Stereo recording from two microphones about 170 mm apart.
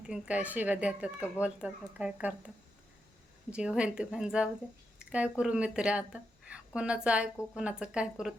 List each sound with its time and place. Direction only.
0.0 s speech: 5° right (ahead or behind)
3.5 s a woman's voice: 5° right (ahead or behind)